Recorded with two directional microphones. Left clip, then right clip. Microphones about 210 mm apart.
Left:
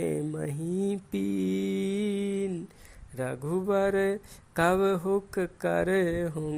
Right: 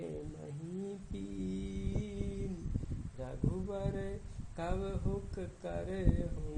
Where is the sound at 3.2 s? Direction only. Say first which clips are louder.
Left 11 dB; 50° left (ahead or behind).